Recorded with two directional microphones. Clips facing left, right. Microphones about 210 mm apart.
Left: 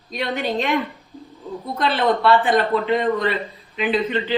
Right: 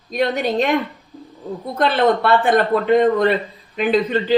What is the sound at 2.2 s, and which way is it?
A man's voice, 50° right (ahead or behind).